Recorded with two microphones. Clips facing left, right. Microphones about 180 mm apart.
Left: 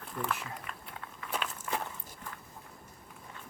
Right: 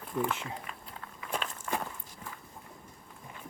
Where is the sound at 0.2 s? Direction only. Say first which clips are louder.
Right 4 dB; 25° right (ahead or behind).